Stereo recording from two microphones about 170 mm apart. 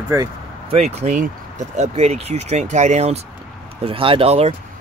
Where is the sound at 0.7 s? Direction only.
40° right (ahead or behind).